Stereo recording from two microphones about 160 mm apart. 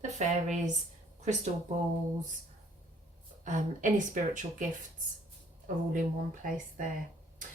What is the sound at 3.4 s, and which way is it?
Speech, 50° right (ahead or behind).